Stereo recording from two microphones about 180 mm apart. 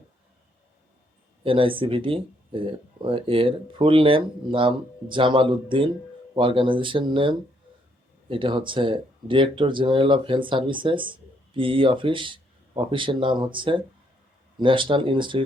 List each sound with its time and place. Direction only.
1.5 s speech: 30° right (ahead or behind)